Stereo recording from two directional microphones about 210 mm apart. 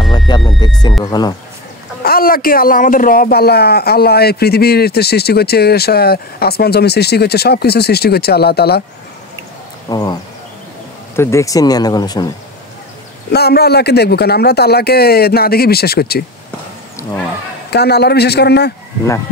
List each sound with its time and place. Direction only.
0.3 s speech: 20° left (ahead or behind)
2.0 s speech: 45° left (ahead or behind)
9.8 s speech: 20° left (ahead or behind)
11.1 s speech: 15° left (ahead or behind)
13.3 s speech: 50° left (ahead or behind)
17.6 s speech: 50° left (ahead or behind)